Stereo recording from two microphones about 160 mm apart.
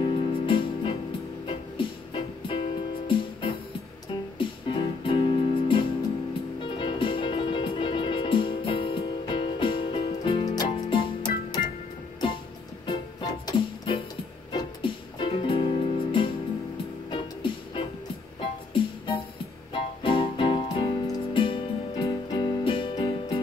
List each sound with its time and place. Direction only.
0.0 s music: 30° left (ahead or behind)
13.5 s music: 35° left (ahead or behind)